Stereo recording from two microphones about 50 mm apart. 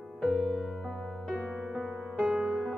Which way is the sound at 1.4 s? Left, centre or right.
Centre.